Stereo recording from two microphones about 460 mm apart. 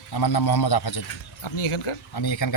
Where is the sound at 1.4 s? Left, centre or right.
Left.